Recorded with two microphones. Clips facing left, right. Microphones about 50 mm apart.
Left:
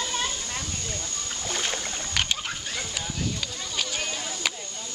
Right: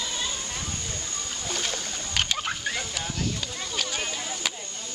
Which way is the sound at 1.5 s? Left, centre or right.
Left.